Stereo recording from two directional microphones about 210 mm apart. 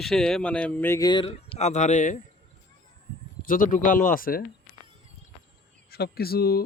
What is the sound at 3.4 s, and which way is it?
Speech, 40° left (ahead or behind).